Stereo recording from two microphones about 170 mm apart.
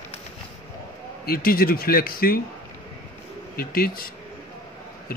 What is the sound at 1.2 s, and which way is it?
A man's voice, 60° left (ahead or behind).